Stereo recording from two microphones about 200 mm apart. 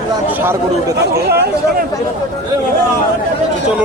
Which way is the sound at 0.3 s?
10° right (ahead or behind).